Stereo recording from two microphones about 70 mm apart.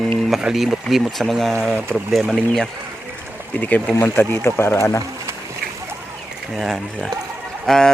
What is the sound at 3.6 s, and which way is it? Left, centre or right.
Speech, left.